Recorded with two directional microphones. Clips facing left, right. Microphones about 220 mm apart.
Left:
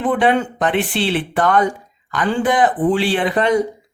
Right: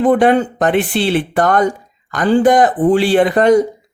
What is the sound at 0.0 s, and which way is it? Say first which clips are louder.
Speech: right 5 dB; 45° right (ahead or behind).